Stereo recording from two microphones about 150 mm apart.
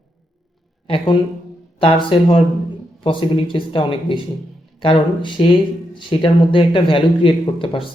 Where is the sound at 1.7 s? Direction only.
35° left (ahead or behind).